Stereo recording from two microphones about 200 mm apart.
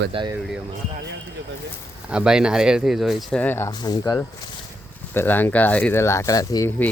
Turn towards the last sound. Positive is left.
turn(degrees=15)  # may be behind; listen again after turning